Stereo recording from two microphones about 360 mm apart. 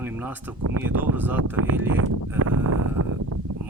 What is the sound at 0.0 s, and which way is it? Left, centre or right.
Speech, centre.